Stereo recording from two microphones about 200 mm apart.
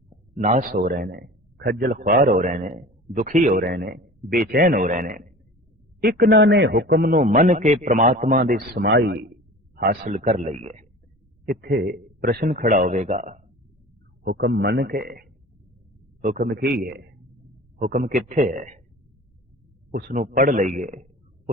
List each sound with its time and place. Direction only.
0.3 s a man's voice: 35° right (ahead or behind)
8.9 s a man's voice: 60° right (ahead or behind)
10.0 s a man's voice: 35° right (ahead or behind)
11.4 s a man's voice: 50° right (ahead or behind)
14.3 s a man's voice: 55° right (ahead or behind); by 18.8 s 40° right (ahead or behind)
19.9 s a man's voice: 55° right (ahead or behind)
20.7 s a sound: 40° right (ahead or behind)